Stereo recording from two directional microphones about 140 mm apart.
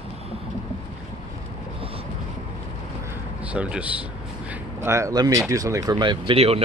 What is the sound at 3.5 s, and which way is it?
Speech, 10° right (ahead or behind).